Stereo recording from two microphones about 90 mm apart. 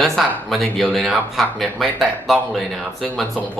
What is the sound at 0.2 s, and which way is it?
Speech, centre (ahead or behind).